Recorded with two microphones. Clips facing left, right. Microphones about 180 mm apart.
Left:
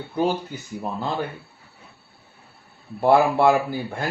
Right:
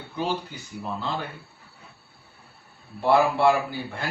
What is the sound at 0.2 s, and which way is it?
Speech, 45° left (ahead or behind).